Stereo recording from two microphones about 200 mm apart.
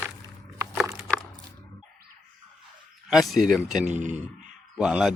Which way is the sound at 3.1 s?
Centre (ahead or behind).